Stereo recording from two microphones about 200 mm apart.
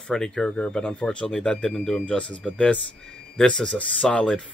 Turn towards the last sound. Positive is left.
turn(degrees=5)  # may be behind; listen again after turning